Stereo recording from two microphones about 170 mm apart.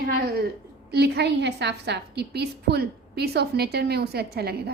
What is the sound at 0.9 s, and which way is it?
A woman's voice, 75° right (ahead or behind).